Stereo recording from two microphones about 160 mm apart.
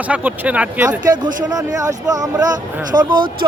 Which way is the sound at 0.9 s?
25° right (ahead or behind).